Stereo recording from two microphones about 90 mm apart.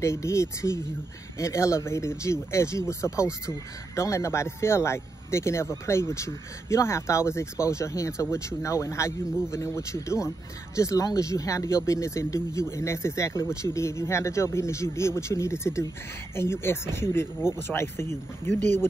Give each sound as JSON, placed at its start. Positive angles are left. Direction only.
{"t": 0.0, "sound": "speech", "side_deg": 30}